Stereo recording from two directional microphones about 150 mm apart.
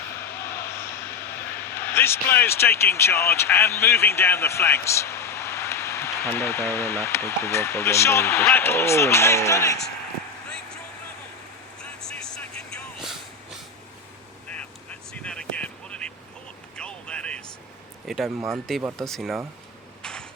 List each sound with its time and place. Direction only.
0.5 s vehicle: 15° left (ahead or behind)
1.7 s speech: 15° left (ahead or behind)
11.8 s vehicle: 5° left (ahead or behind)
15.2 s a sound: 5° left (ahead or behind)
18.0 s speech: centre (ahead or behind)
20.0 s a sound: 5° left (ahead or behind)